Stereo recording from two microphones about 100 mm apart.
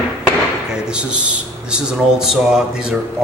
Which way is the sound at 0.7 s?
10° right (ahead or behind).